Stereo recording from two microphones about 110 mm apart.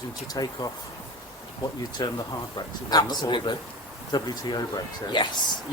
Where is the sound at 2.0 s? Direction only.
40° left (ahead or behind).